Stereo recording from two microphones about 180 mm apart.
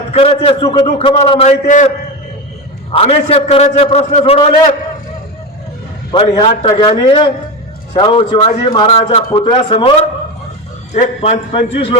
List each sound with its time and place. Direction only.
0.1 s a man's voice: 30° left (ahead or behind)
2.9 s a man's voice: 35° left (ahead or behind)
6.1 s a man's voice: 20° left (ahead or behind)
10.9 s a man's voice: 35° left (ahead or behind)